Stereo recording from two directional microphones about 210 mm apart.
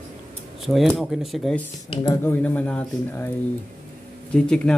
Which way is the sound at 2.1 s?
10° left (ahead or behind).